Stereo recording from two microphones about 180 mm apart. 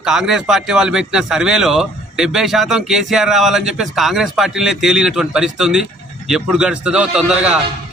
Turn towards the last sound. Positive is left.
turn(degrees=-5)  # may be behind; listen again after turning